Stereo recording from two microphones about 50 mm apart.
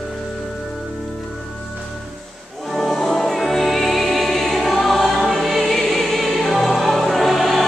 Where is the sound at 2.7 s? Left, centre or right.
Centre.